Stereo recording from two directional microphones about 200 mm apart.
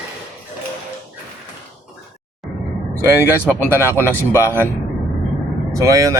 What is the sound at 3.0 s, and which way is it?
Speech, 10° right (ahead or behind).